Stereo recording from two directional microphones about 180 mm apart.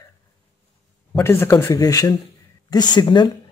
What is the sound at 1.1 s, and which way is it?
A man's voice, 15° left (ahead or behind).